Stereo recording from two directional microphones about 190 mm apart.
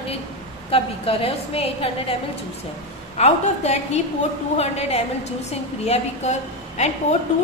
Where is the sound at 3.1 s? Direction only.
35° left (ahead or behind).